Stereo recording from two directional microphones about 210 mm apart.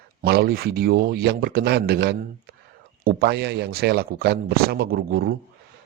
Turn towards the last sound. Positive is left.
turn(degrees=-45)  # may be behind; listen again after turning